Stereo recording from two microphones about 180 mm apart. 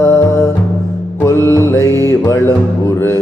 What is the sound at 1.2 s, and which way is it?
Mantra, 15° left (ahead or behind).